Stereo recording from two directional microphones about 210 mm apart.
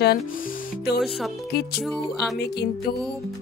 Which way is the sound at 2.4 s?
50° left (ahead or behind).